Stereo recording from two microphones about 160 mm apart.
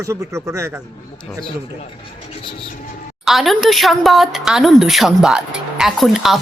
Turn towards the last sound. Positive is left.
turn(degrees=0)  # may be behind; listen again after turning